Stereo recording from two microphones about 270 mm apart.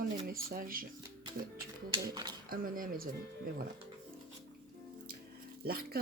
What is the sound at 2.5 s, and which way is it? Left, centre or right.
Speech, right.